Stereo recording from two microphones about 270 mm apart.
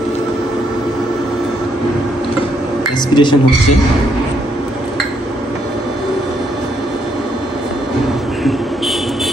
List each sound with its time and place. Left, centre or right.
3.2 s a man's voice: centre